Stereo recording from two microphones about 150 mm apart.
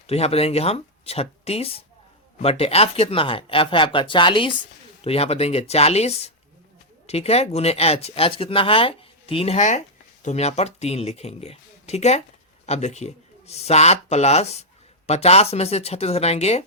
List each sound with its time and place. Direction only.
0.1 s speech: 45° left (ahead or behind)